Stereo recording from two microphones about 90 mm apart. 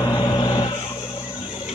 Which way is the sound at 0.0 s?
55° left (ahead or behind).